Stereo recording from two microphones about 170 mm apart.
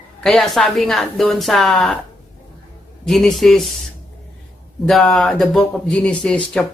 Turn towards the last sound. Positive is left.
turn(degrees=5)  # may be behind; listen again after turning